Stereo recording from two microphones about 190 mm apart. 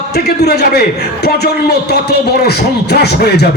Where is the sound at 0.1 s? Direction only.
55° left (ahead or behind).